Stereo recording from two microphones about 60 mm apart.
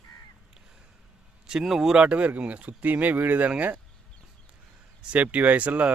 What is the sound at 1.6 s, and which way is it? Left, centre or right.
Speech, centre.